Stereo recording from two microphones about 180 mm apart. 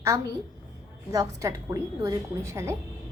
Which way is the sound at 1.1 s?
20° right (ahead or behind).